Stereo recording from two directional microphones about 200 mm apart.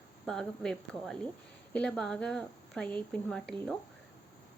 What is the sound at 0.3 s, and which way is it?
A woman's voice, 5° left (ahead or behind).